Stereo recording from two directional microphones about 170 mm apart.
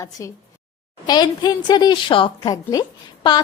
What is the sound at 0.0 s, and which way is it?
A woman's voice, 15° left (ahead or behind).